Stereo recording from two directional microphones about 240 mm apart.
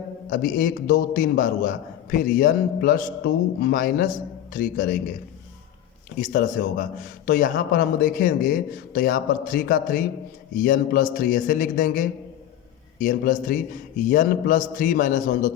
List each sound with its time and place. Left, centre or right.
0.3 s a man's voice: left
6.1 s a man's voice: left